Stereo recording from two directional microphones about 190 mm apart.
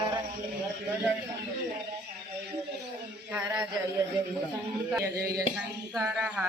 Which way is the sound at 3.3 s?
5° right (ahead or behind).